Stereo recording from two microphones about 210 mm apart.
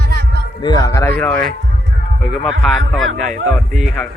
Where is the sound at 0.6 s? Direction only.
20° left (ahead or behind); by 2.5 s centre (ahead or behind).